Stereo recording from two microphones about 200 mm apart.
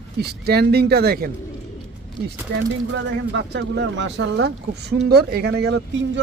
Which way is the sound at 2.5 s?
60° right (ahead or behind).